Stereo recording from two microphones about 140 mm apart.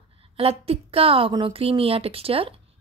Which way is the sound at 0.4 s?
45° right (ahead or behind).